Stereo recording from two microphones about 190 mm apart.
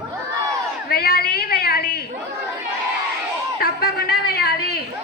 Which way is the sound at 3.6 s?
55° left (ahead or behind).